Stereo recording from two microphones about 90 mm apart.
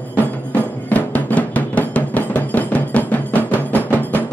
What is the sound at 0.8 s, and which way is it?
Music, 15° left (ahead or behind).